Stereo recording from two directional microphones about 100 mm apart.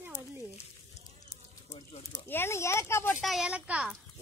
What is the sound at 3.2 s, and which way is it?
Speech, 5° right (ahead or behind).